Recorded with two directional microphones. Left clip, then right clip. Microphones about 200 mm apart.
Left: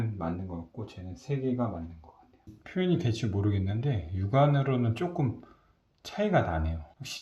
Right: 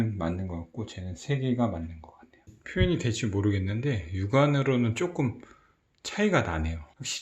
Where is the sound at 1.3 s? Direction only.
55° right (ahead or behind).